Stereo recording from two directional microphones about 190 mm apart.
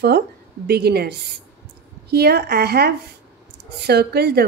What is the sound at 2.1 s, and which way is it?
A woman's voice, 55° right (ahead or behind).